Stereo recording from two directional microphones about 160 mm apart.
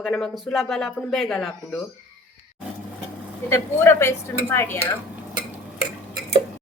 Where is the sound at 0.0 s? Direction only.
Centre (ahead or behind).